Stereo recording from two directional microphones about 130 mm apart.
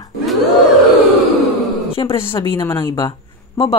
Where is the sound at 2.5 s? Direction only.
20° left (ahead or behind).